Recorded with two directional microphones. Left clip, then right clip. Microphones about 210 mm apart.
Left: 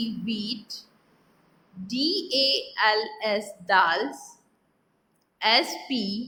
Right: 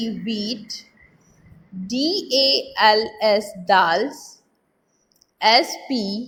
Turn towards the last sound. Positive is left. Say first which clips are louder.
# right 4 dB
turn(degrees=-5)  # may be behind; listen again after turning